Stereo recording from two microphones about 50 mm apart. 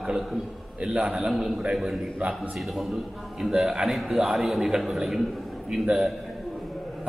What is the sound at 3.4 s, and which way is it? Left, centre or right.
A man's voice, centre.